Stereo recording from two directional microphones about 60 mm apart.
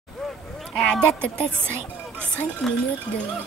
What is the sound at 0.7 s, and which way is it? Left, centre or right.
A woman's voice, centre.